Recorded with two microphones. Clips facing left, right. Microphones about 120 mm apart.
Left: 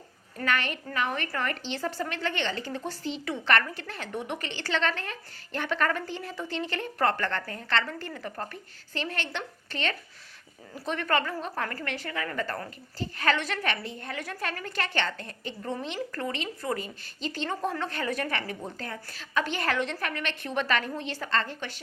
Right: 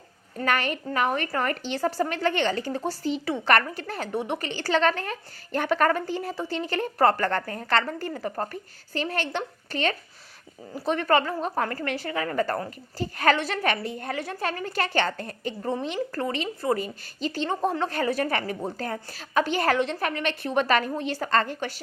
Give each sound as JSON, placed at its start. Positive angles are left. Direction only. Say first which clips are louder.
{"t": 0.4, "sound": "a woman's voice", "louder": "right 4 dB", "side_deg": -40}
{"t": 14.2, "sound": "a woman's voice", "louder": "right 4 dB", "side_deg": -30}